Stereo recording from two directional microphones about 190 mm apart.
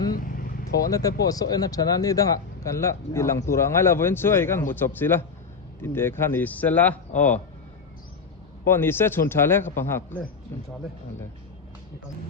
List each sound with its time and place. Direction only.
0.1 s vehicle: 45° left (ahead or behind)
0.9 s speech: 20° left (ahead or behind)
8.6 s speech: 10° left (ahead or behind)